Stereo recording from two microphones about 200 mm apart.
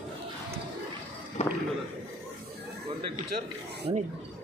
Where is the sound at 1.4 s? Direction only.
35° left (ahead or behind).